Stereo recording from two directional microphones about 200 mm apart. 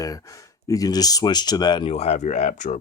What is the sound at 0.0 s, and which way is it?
Speech, 15° left (ahead or behind).